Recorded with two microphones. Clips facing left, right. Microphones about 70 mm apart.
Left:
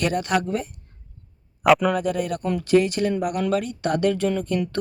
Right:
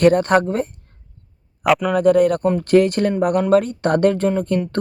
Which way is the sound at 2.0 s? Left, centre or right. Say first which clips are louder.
Right 11 dB; right.